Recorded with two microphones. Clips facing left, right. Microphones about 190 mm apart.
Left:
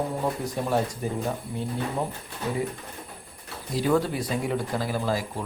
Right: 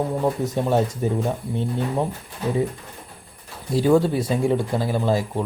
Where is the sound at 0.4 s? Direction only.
25° right (ahead or behind).